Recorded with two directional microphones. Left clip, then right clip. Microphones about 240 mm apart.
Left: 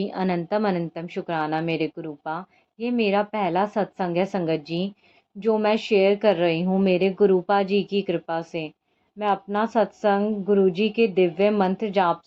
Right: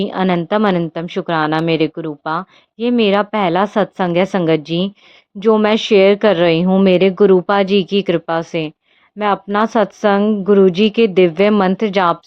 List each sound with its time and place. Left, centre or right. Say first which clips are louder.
0.0 s a woman's voice: right 9 dB; right